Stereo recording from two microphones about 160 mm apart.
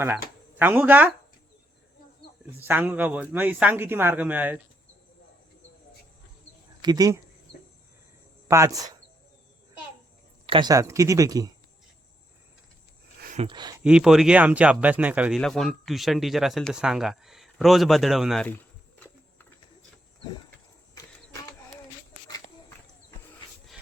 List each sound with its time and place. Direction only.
0.5 s a man's voice: 10° right (ahead or behind)
2.6 s a man's voice: 10° right (ahead or behind)
6.8 s speech: 25° right (ahead or behind)
8.4 s speech: 20° right (ahead or behind)
10.4 s speech: 30° right (ahead or behind)
13.5 s speech: 25° right (ahead or behind)
13.8 s a man's voice: 5° right (ahead or behind)
15.4 s speech: 5° left (ahead or behind)
18.4 s a sound: 10° left (ahead or behind)